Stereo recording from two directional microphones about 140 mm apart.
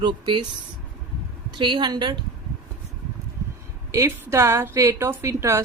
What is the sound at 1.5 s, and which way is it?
Speech, 35° right (ahead or behind).